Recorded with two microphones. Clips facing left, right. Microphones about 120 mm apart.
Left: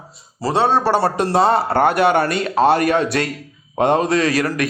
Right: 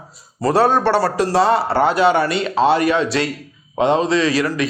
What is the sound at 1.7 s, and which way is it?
Speech, 55° left (ahead or behind).